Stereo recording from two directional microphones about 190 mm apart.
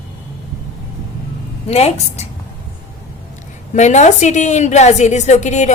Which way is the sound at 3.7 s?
40° left (ahead or behind).